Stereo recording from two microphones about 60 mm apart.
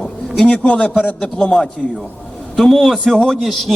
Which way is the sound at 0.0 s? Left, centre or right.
Centre.